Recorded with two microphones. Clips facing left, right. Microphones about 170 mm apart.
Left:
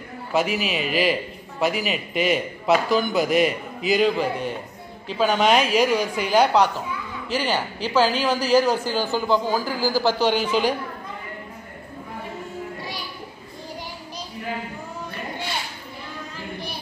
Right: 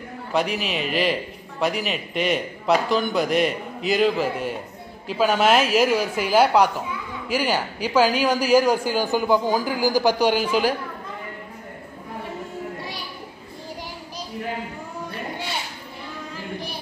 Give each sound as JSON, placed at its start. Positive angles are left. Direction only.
{"t": 0.3, "sound": "a man's voice", "side_deg": 5}